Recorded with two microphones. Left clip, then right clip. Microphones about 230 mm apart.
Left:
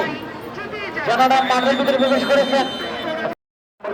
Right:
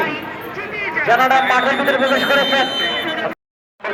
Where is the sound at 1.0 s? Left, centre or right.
Left.